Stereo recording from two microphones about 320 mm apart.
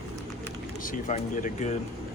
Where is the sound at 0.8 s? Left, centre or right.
Left.